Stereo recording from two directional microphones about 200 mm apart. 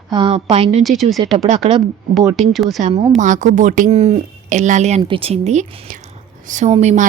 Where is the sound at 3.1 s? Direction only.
40° right (ahead or behind).